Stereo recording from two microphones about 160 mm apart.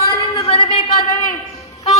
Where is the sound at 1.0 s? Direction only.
20° left (ahead or behind).